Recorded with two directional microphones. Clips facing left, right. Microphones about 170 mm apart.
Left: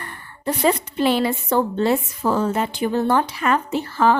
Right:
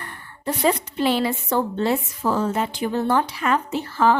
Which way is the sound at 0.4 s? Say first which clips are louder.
Left 2 dB; 55° left (ahead or behind).